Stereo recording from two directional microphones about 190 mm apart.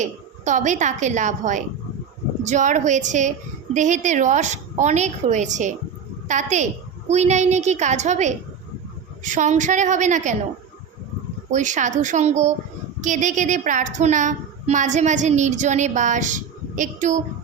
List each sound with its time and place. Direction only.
0.0 s a woman's voice: 40° right (ahead or behind)
11.5 s a woman's voice: 40° right (ahead or behind)